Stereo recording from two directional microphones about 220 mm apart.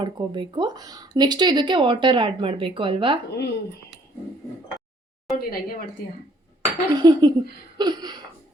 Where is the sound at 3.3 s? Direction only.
50° left (ahead or behind).